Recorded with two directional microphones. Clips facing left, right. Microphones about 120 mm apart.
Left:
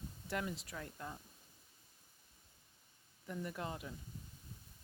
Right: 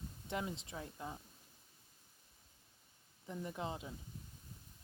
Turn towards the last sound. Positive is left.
turn(degrees=-20)  # may be behind; listen again after turning